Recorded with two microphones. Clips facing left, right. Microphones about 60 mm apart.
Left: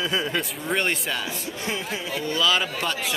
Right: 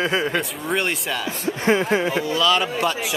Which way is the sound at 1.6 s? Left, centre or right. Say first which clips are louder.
Right 12 dB; right.